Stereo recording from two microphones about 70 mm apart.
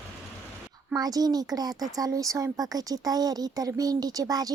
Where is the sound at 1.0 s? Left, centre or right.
Right.